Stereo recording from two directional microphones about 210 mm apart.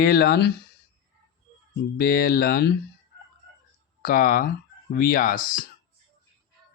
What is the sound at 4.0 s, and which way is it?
Speech, 45° left (ahead or behind).